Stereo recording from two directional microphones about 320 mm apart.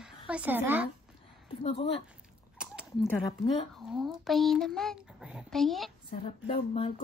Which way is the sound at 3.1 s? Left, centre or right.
Centre.